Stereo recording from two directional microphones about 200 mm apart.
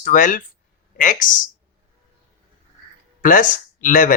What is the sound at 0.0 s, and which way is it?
Speech, 40° left (ahead or behind).